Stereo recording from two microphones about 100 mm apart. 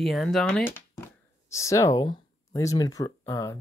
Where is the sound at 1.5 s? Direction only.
30° left (ahead or behind).